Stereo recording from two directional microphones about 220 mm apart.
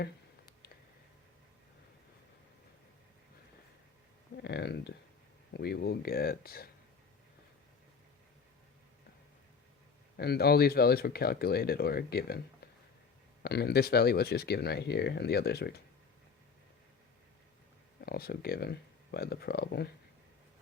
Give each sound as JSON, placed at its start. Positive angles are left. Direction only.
{"t": 4.4, "sound": "speech", "side_deg": 50}
{"t": 10.2, "sound": "speech", "side_deg": 45}
{"t": 13.4, "sound": "speech", "side_deg": 45}
{"t": 18.0, "sound": "speech", "side_deg": 45}